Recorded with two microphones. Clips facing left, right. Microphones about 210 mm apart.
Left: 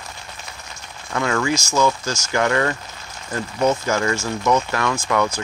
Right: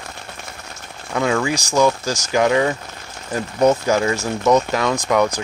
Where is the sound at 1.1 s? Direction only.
15° right (ahead or behind).